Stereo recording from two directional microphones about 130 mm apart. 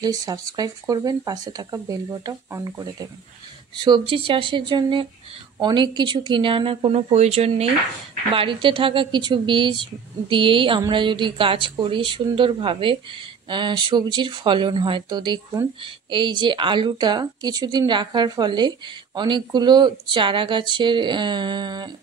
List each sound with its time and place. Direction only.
0.0 s speech: 30° right (ahead or behind)